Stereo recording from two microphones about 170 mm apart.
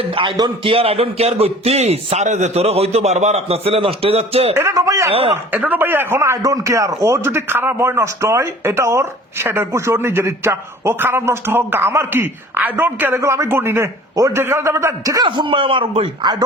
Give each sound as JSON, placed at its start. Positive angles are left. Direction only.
{"t": 0.0, "sound": "a man's voice", "side_deg": -30}
{"t": 4.5, "sound": "speech", "side_deg": -20}
{"t": 5.1, "sound": "a man's voice", "side_deg": -35}
{"t": 5.5, "sound": "a man's voice", "side_deg": -10}